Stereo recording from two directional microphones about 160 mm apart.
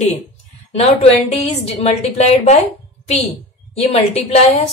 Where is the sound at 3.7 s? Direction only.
40° left (ahead or behind).